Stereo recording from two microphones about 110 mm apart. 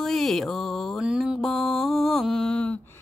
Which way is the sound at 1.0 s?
5° right (ahead or behind).